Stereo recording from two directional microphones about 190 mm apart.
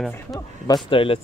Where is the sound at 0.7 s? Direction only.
25° left (ahead or behind).